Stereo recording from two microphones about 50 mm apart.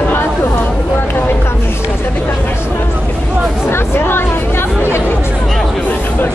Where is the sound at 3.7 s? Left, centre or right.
Left.